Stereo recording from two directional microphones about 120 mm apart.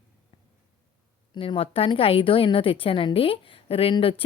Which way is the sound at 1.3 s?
50° left (ahead or behind).